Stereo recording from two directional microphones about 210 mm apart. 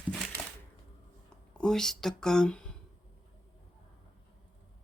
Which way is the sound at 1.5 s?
5° left (ahead or behind).